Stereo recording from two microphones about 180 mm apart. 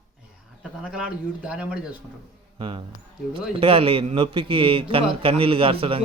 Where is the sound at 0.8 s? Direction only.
5° right (ahead or behind).